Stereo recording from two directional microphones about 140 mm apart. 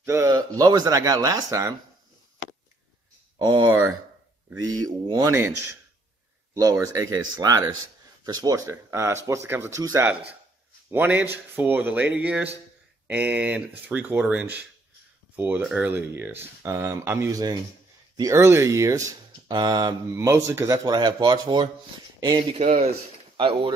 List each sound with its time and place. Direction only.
0.0 s speech: 20° right (ahead or behind)
3.3 s speech: 30° right (ahead or behind)
22.6 s a man's voice: 50° right (ahead or behind)
23.3 s speech: 40° right (ahead or behind)